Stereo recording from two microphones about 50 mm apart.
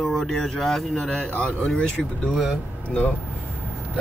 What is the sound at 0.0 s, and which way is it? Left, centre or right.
Speech, centre.